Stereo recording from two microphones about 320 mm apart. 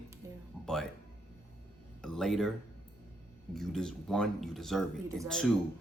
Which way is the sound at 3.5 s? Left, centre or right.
Centre.